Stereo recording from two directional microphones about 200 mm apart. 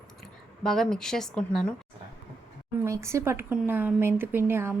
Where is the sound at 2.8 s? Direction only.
15° right (ahead or behind).